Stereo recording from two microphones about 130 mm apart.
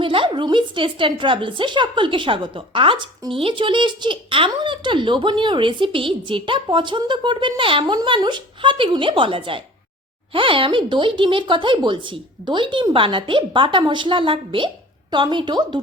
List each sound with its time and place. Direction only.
0.0 s speech: 40° right (ahead or behind)